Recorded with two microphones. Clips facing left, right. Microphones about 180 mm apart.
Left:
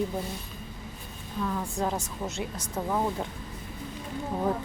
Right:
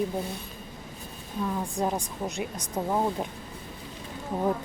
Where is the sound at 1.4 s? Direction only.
20° right (ahead or behind).